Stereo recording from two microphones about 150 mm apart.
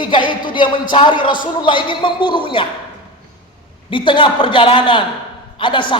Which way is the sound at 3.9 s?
35° left (ahead or behind).